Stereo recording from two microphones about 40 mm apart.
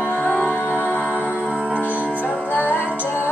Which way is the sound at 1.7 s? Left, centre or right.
Right.